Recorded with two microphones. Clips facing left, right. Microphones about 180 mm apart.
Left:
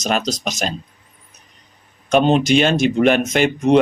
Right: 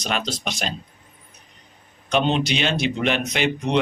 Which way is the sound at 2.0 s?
45° left (ahead or behind).